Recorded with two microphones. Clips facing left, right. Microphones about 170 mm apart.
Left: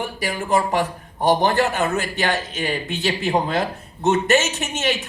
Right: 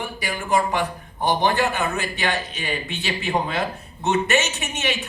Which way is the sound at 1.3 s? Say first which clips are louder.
Left 3 dB; 40° left (ahead or behind).